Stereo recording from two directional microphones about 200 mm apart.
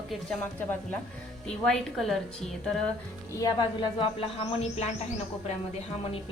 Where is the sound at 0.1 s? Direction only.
5° left (ahead or behind).